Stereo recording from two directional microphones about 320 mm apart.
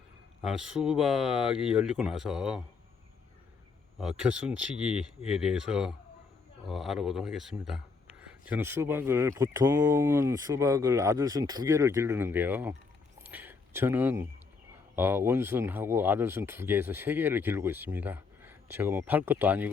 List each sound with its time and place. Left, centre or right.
0.4 s speech: centre
4.2 s speech: centre
13.2 s a sound: centre
14.9 s speech: centre